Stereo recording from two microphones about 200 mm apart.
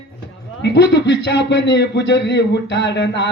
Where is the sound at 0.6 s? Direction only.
60° left (ahead or behind).